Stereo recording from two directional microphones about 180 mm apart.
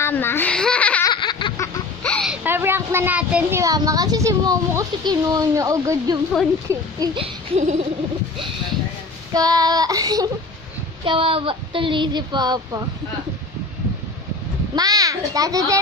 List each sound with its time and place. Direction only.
0.0 s speech: 15° left (ahead or behind)
1.0 s laughter: 25° left (ahead or behind)
2.0 s a sound: 5° left (ahead or behind)
2.4 s a woman's voice: 10° right (ahead or behind)
7.2 s a sound: 40° right (ahead or behind)
9.3 s speech: 20° right (ahead or behind)
14.8 s speech: 20° right (ahead or behind)